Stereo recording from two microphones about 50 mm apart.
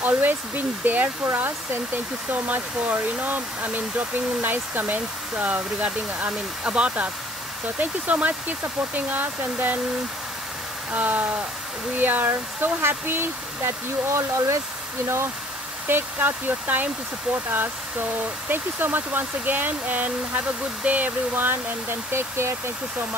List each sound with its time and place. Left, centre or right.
0.0 s speech: right
1.2 s speech: right
2.3 s speech: right
10.9 s speech: right
15.9 s speech: right
18.5 s speech: right